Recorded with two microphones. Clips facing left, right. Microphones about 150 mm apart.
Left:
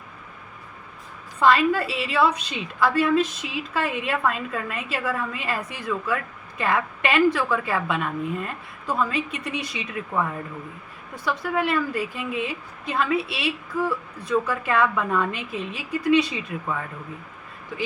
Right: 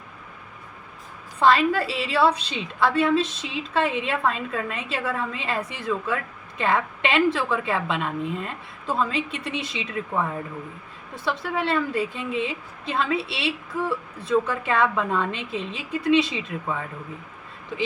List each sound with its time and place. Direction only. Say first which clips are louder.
1.4 s a woman's voice: even; 30° right (ahead or behind)
11.1 s a woman's voice: left 1 dB; 25° right (ahead or behind)